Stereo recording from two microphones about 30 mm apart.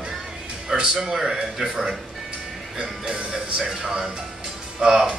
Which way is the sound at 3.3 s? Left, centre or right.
Right.